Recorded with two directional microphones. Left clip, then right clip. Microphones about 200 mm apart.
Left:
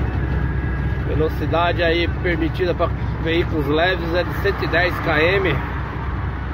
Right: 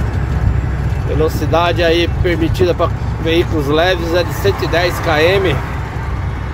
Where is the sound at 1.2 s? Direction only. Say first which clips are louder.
Right 5 dB; 30° right (ahead or behind).